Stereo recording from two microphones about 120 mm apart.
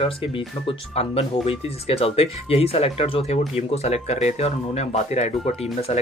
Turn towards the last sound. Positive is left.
turn(degrees=65)  # may be behind; listen again after turning